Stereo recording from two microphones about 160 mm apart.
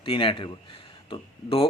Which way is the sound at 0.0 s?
35° left (ahead or behind).